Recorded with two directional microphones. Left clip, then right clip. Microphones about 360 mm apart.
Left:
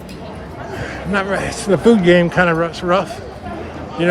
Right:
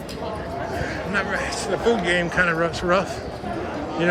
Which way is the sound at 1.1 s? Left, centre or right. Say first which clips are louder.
Left 6 dB; centre.